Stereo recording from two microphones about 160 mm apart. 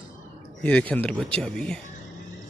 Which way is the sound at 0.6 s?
10° left (ahead or behind).